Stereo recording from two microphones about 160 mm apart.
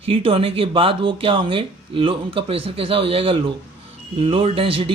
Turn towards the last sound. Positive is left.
turn(degrees=-35)  # may be behind; listen again after turning